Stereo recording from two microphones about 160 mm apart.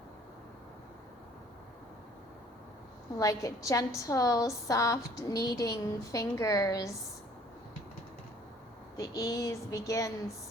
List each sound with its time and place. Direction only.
3.2 s a woman's voice: 20° left (ahead or behind)
9.0 s a woman's voice: 20° left (ahead or behind)